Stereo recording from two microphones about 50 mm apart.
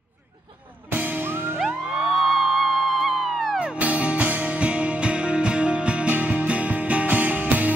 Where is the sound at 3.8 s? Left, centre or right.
Right.